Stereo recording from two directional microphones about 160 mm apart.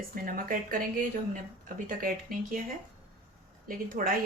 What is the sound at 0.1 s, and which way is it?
Speech, 60° right (ahead or behind).